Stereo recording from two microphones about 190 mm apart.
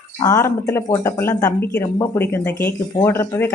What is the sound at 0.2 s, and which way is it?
A woman's voice, 15° left (ahead or behind).